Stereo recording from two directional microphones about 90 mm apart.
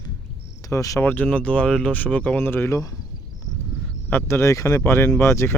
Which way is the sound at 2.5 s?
30° left (ahead or behind).